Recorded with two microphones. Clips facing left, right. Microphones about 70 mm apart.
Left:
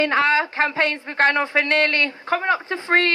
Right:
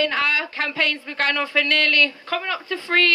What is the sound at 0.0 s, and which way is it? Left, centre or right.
A woman's voice, left.